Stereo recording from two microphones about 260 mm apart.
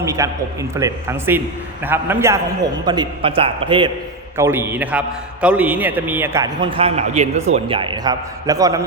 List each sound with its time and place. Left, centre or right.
0.0 s a man's voice: centre